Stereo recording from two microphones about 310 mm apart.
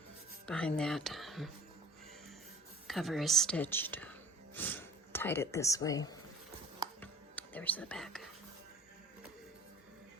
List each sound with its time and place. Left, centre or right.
0.4 s speech: centre
2.8 s speech: centre
7.0 s music: centre